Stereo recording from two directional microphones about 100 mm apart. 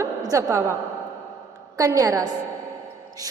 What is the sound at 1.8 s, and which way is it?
Speech, 35° right (ahead or behind).